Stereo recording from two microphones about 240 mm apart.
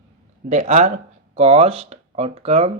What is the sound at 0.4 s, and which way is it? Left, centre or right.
Speech, right.